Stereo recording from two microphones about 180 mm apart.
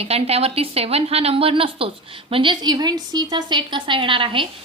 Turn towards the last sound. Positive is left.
turn(degrees=-30)  # may be behind; listen again after turning